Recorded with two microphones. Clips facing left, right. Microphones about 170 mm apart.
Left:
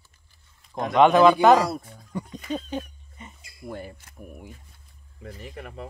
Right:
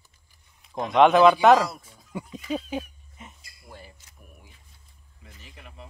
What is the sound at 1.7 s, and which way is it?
Speech, 55° left (ahead or behind).